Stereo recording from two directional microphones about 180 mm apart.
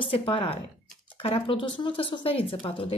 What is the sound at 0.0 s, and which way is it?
Speech, 30° left (ahead or behind).